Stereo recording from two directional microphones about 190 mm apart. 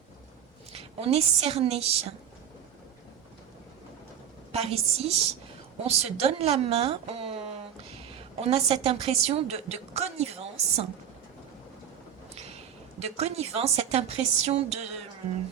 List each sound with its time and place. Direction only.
0.7 s a woman's voice: 30° right (ahead or behind)
4.5 s speech: 30° right (ahead or behind)
12.3 s a woman's voice: 35° right (ahead or behind)